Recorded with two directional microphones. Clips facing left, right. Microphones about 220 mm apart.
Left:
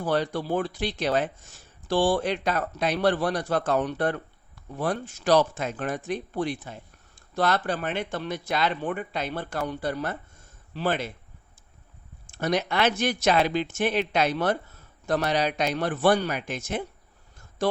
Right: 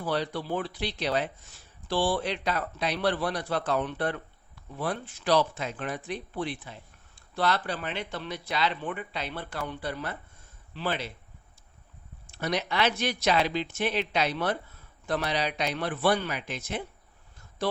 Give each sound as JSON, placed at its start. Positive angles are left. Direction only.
{"t": 0.0, "sound": "speech", "side_deg": 45}
{"t": 12.3, "sound": "speech", "side_deg": 45}